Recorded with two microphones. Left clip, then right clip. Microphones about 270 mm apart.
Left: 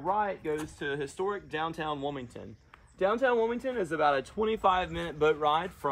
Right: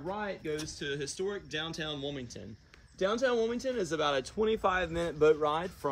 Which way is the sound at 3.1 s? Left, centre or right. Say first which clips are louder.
Left 3 dB; centre.